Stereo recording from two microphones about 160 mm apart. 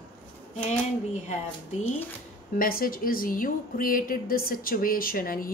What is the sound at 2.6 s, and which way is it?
A woman's voice, 65° left (ahead or behind).